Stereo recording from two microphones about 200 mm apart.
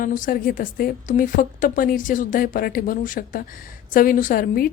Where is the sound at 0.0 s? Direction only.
45° left (ahead or behind).